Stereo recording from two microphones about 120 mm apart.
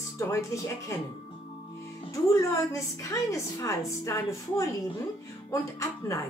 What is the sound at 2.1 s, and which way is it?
A woman's voice, 25° left (ahead or behind).